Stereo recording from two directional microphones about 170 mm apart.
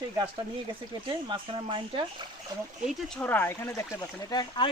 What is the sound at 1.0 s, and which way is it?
Speech, 30° right (ahead or behind).